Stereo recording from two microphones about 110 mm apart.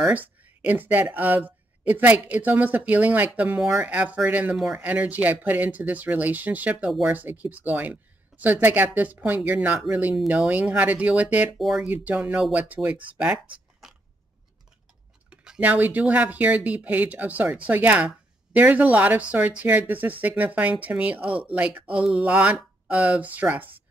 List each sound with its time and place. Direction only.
0.0 s speech: 10° right (ahead or behind)
11.5 s speech: centre (ahead or behind)
11.8 s speech: 15° right (ahead or behind)
13.8 s a sound: 5° right (ahead or behind)
15.2 s speech: 10° right (ahead or behind)